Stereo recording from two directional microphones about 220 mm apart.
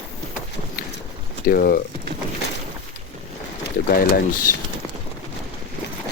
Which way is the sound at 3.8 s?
40° left (ahead or behind).